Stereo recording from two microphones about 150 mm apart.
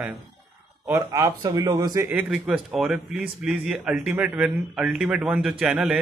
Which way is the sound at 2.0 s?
5° right (ahead or behind).